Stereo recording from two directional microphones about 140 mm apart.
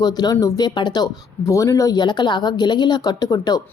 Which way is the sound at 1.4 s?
20° left (ahead or behind).